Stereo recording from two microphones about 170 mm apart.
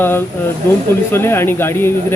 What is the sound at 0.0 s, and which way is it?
A man's voice, 10° left (ahead or behind).